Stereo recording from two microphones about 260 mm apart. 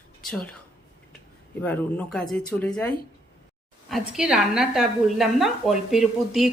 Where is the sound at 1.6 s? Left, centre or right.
Centre.